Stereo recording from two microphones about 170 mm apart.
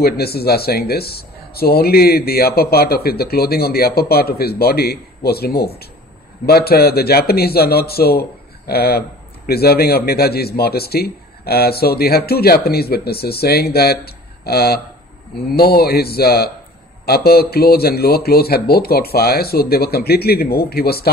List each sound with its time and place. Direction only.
0.0 s speech: 65° left (ahead or behind)